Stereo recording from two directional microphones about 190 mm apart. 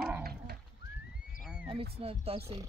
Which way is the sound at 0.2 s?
55° right (ahead or behind).